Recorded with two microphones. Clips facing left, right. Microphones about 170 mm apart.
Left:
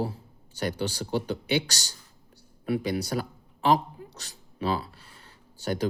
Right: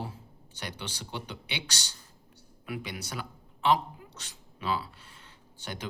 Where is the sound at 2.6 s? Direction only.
40° left (ahead or behind).